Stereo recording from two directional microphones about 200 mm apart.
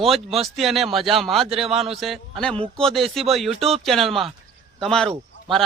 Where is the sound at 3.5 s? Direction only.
30° right (ahead or behind).